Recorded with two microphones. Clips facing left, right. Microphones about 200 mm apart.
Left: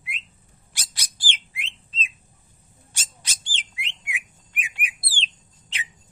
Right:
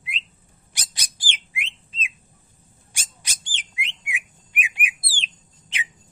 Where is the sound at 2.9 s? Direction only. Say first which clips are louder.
Even; 15° right (ahead or behind).